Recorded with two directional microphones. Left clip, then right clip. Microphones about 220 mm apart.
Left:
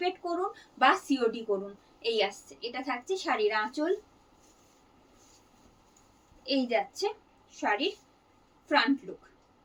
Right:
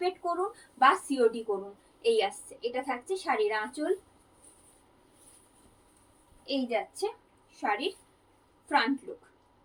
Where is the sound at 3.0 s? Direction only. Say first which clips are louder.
Left 1 dB; 15° left (ahead or behind).